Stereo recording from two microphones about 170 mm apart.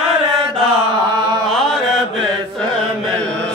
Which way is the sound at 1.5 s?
Centre (ahead or behind).